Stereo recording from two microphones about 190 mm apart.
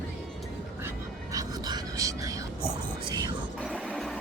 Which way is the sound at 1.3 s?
20° right (ahead or behind).